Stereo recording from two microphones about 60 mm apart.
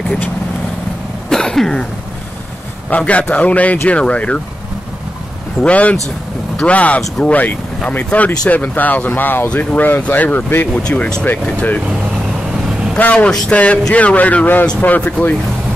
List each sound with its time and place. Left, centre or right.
1.3 s cough: centre
2.9 s speech: left
5.6 s speech: left
9.5 s speech: left
10.7 s speech: centre
11.4 s speech: left
12.3 s vehicle: centre
12.9 s speech: left